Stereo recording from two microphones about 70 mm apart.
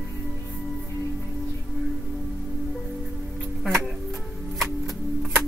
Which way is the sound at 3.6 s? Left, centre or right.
Centre.